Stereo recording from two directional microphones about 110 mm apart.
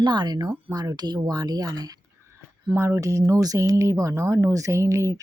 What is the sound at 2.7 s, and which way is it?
Speech, 25° right (ahead or behind).